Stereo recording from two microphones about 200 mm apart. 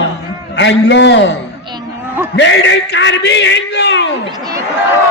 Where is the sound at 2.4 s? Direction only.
65° left (ahead or behind).